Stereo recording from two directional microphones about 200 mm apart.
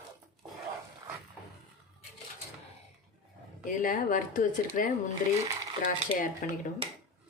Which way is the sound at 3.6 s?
40° left (ahead or behind).